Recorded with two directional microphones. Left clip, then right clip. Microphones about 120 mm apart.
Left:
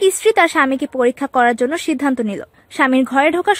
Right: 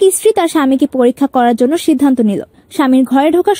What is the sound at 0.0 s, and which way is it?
Speech, 30° right (ahead or behind).